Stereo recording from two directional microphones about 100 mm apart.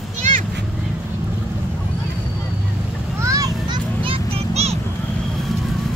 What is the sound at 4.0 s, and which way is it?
Vehicle, 75° right (ahead or behind).